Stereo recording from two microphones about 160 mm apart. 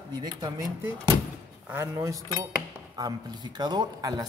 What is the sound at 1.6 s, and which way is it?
Speech, 15° right (ahead or behind).